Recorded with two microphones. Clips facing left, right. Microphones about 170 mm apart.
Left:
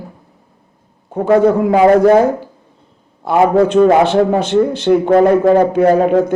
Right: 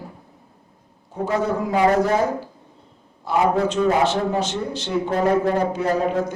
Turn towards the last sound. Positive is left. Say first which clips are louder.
# left 10 dB
turn(degrees=55)  # may be behind; listen again after turning